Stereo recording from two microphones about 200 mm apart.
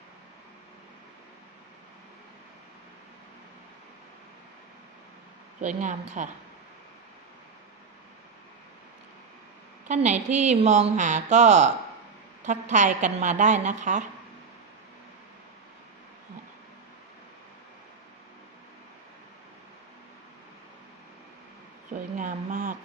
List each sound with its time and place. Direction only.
5.5 s a woman's voice: 35° right (ahead or behind)
9.9 s a woman's voice: 35° right (ahead or behind)
21.8 s a sound: 40° right (ahead or behind)